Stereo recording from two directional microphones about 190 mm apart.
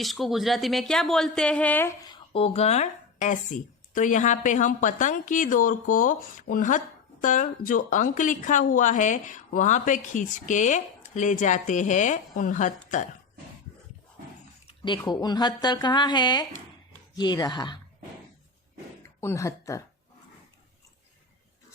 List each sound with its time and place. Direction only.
0.0 s speech: centre (ahead or behind)
2.0 s a woman's voice: 30° left (ahead or behind)
14.7 s speech: 25° left (ahead or behind)
19.2 s speech: 15° left (ahead or behind)